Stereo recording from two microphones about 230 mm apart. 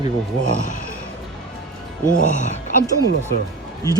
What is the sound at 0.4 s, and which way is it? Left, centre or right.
Speech, left.